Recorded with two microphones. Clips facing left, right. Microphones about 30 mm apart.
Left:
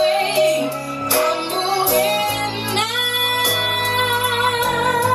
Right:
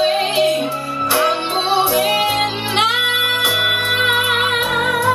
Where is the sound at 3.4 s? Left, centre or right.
Right.